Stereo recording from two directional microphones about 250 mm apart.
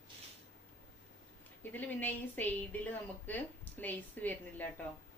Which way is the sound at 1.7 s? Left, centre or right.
Centre.